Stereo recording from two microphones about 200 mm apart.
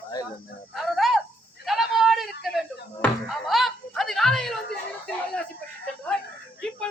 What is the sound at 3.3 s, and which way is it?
Snicker, centre (ahead or behind).